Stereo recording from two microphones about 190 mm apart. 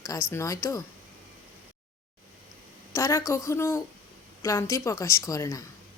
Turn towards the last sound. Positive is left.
turn(degrees=15)  # may be behind; listen again after turning